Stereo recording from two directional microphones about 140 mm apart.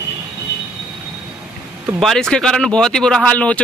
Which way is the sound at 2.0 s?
5° left (ahead or behind).